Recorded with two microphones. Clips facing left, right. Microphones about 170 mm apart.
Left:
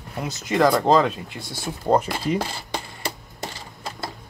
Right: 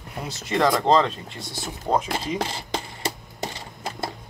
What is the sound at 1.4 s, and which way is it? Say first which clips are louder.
Speech: right 2 dB; 20° right (ahead or behind).